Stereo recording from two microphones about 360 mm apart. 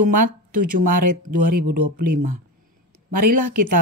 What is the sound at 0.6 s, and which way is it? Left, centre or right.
Speech, right.